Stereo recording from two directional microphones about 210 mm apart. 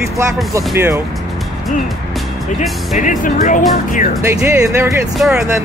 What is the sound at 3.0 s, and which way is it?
Speech, 40° left (ahead or behind).